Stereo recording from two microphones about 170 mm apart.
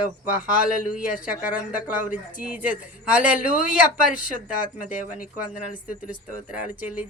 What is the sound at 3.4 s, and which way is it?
Speech, 50° left (ahead or behind).